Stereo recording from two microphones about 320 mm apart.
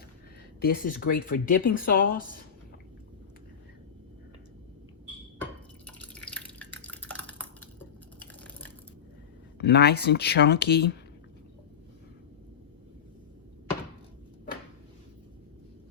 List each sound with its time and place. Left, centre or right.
0.6 s speech: left
5.4 s drip: centre
9.6 s speech: left